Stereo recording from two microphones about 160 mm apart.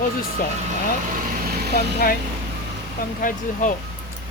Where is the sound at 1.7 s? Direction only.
65° left (ahead or behind).